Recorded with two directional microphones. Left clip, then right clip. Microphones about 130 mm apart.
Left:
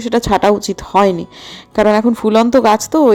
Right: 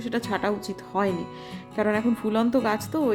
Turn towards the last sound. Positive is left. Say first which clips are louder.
# left 15 dB
turn(degrees=55)  # may be behind; listen again after turning